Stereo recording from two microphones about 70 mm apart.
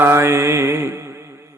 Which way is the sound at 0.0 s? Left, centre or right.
Right.